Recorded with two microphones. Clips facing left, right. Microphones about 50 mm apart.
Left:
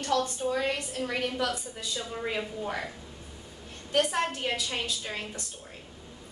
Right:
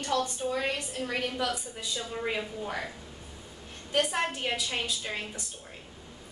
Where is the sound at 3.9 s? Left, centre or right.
Centre.